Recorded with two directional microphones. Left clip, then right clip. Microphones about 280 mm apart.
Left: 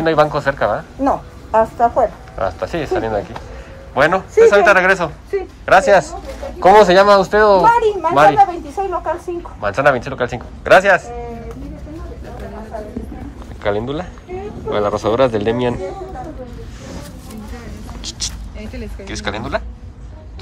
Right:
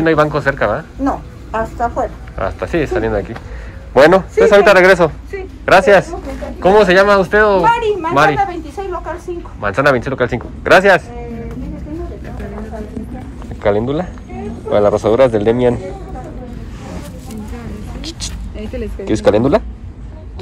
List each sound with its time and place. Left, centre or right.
0.0 s speech: centre
2.3 s speech: centre
5.3 s a sound: left
5.7 s speech: centre
9.6 s speech: centre
13.6 s speech: centre
18.8 s speech: centre